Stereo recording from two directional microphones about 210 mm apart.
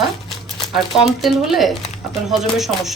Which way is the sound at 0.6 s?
Centre (ahead or behind).